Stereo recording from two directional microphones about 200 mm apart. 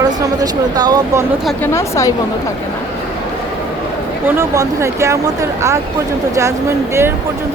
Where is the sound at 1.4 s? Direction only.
10° left (ahead or behind).